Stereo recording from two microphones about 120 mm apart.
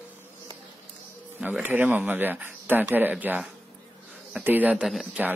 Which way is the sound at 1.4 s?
15° right (ahead or behind).